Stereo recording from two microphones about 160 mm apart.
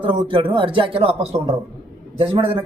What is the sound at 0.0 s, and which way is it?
Speech, 30° right (ahead or behind).